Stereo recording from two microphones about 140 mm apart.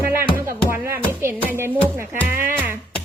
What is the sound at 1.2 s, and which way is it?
Speech, 15° right (ahead or behind).